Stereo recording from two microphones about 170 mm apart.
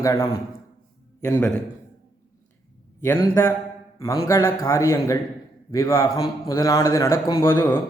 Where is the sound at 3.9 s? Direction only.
20° left (ahead or behind).